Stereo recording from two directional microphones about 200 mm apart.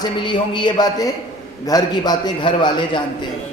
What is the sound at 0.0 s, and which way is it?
A man's voice, 25° left (ahead or behind).